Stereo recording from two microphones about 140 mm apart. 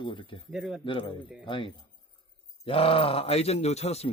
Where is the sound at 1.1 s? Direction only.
35° left (ahead or behind).